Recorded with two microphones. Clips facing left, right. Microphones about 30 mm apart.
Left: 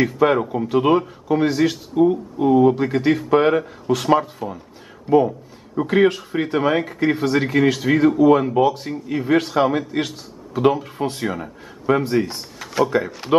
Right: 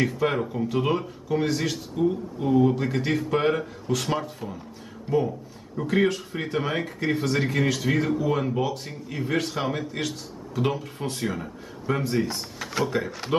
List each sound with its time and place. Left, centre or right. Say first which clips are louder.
0.0 s speech: left 7 dB; centre
5.8 s speech: left 6 dB; left; by 12.9 s centre
13.3 s speech: left 9 dB; left